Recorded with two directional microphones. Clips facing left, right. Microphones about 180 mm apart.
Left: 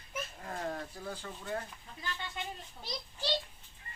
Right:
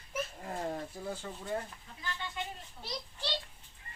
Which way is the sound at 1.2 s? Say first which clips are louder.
Right 1 dB; 5° right (ahead or behind).